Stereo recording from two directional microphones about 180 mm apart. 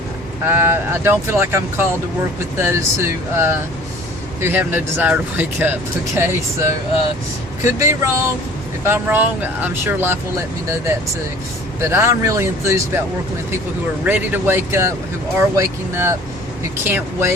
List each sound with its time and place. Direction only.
0.4 s speech: 10° right (ahead or behind)
11.8 s speech: 15° right (ahead or behind)
14.0 s speech: 10° right (ahead or behind)